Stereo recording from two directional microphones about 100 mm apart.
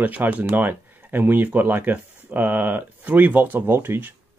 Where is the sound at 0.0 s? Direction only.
15° right (ahead or behind).